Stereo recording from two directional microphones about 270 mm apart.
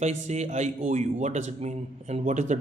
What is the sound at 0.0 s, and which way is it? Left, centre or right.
A man's voice, right.